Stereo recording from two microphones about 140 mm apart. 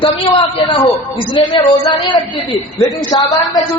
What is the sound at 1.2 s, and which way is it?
A man's voice, 35° left (ahead or behind).